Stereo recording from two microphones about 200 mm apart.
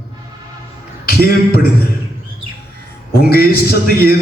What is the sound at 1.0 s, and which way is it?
Speech, 50° left (ahead or behind).